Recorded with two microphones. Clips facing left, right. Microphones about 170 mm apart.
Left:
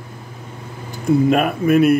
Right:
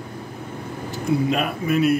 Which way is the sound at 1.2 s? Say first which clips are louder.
Left 6 dB; 50° left (ahead or behind).